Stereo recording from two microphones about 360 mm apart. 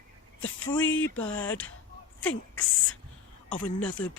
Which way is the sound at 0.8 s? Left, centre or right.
Left.